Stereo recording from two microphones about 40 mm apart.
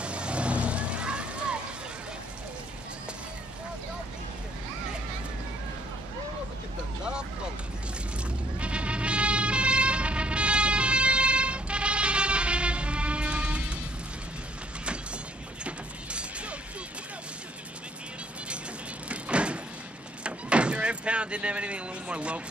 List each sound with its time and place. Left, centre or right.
0.0 s vehicle: right
8.5 s vehicle: right
15.6 s music: right
19.0 s door: right